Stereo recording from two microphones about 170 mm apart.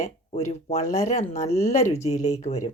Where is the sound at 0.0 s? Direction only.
40° left (ahead or behind).